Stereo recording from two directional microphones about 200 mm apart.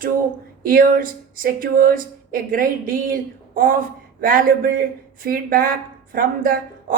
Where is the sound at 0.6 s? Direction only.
45° right (ahead or behind).